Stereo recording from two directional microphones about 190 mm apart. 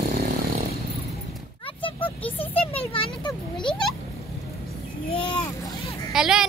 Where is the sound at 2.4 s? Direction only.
30° left (ahead or behind).